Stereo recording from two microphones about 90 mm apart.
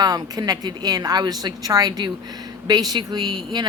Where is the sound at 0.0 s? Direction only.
45° right (ahead or behind).